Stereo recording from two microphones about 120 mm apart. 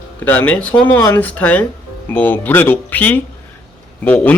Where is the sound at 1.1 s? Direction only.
15° left (ahead or behind).